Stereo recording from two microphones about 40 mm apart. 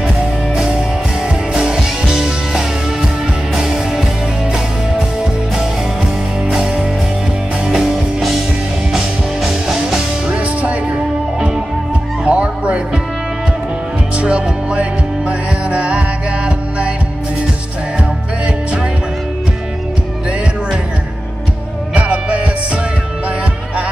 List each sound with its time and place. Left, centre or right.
1.5 s music: centre
3.5 s music: centre
8.9 s music: centre
10.2 s music: right
12.3 s music: right
14.1 s music: right
21.9 s music: right